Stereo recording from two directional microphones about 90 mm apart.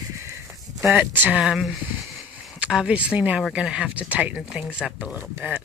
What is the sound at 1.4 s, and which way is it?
Speech, 5° right (ahead or behind).